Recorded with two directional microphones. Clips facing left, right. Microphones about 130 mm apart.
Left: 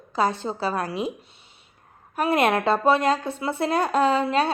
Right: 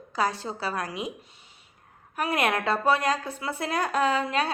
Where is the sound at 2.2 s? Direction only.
30° left (ahead or behind).